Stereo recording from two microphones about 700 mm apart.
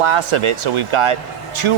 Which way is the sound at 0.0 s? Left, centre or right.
Right.